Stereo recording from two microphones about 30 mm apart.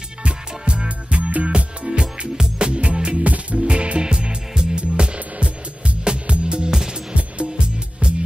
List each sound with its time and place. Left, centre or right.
0.2 s music: right
6.7 s music: right
7.2 s music: right